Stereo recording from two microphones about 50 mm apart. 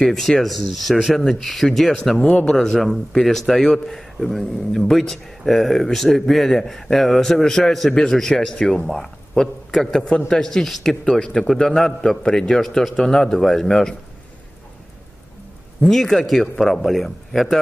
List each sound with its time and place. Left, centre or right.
0.0 s speech: centre
2.2 s speech: centre
2.5 s a man's voice: centre
10.0 s a man's voice: centre
15.8 s speech: centre